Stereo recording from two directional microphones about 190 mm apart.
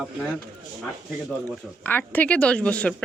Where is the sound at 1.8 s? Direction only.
10° left (ahead or behind).